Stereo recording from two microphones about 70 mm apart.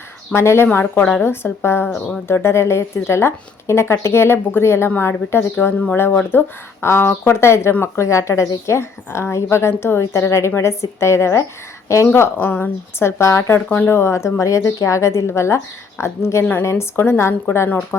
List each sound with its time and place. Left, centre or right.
0.3 s speech: left